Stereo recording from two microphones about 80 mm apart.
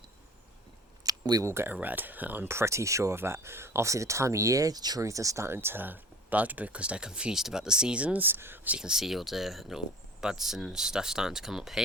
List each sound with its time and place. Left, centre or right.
1.0 s a sound: right
1.5 s speech: right
8.7 s speech: centre